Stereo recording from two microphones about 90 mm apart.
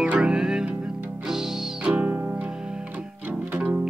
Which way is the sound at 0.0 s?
10° right (ahead or behind).